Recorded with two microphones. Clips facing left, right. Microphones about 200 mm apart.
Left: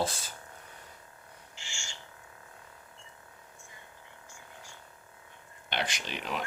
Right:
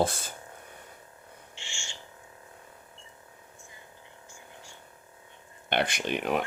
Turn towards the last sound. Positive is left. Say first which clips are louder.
# right 8 dB
turn(degrees=-55)  # may be behind; listen again after turning